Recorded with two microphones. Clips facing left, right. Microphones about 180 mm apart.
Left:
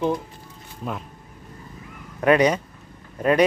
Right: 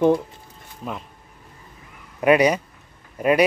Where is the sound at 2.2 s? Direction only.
10° right (ahead or behind).